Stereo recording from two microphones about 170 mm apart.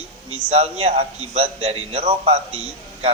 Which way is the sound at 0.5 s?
35° right (ahead or behind).